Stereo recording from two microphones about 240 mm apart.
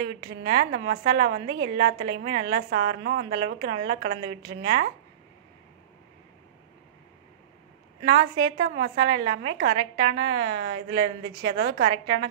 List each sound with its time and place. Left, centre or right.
0.0 s a woman's voice: right
8.0 s a woman's voice: right